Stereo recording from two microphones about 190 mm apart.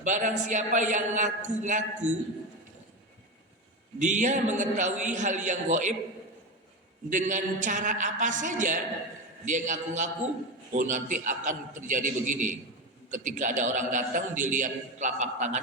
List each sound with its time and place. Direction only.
0.0 s a man's voice: 40° right (ahead or behind)
3.9 s a man's voice: 40° right (ahead or behind)
7.1 s a man's voice: 40° right (ahead or behind)